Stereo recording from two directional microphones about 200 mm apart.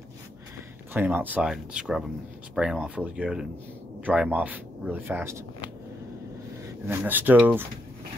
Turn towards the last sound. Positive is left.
turn(degrees=-10)  # may be behind; listen again after turning